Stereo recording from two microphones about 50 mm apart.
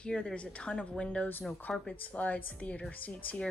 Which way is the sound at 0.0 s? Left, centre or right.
Left.